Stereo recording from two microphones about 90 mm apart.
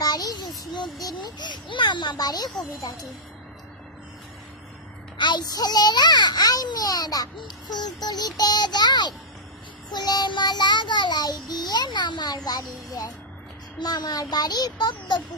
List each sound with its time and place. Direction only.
0.0 s a sound: 45° left (ahead or behind)
1.1 s a child's voice: 55° left (ahead or behind)
5.1 s a child's voice: 55° left (ahead or behind)
13.7 s a child's voice: 50° left (ahead or behind)